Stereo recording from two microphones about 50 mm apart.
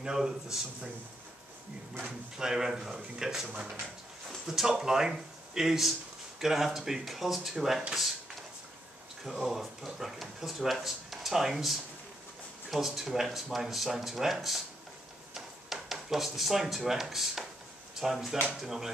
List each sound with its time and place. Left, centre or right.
0.0 s speech: centre
2.0 s speech: centre
3.4 s speech: right
4.5 s speech: centre
9.2 s speech: centre